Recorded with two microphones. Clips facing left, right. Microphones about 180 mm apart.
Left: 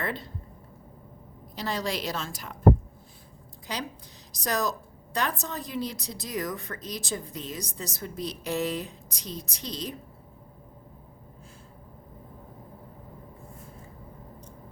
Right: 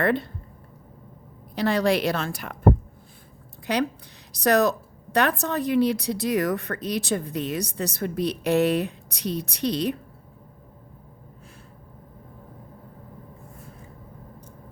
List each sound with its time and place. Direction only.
0.0 s speech: 60° right (ahead or behind)
1.5 s speech: 60° right (ahead or behind)
3.7 s speech: 65° right (ahead or behind)